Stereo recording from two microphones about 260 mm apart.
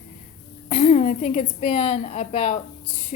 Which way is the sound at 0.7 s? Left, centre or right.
Left.